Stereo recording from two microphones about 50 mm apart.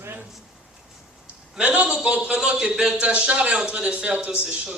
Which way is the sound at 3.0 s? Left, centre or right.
Right.